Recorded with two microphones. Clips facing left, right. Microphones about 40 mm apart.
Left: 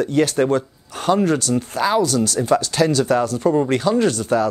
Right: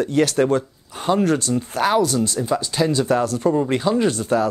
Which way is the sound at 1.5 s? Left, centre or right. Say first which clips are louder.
Left 2 dB; centre.